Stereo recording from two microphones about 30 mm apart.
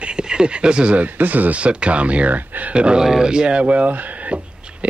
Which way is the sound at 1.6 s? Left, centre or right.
Right.